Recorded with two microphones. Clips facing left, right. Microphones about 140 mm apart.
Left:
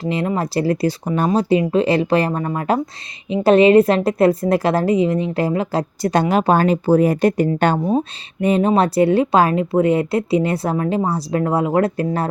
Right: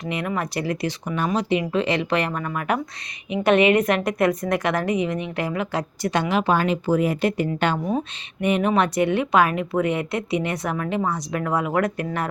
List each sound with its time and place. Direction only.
0.0 s a woman's voice: 30° left (ahead or behind)
7.9 s a woman's voice: 30° left (ahead or behind)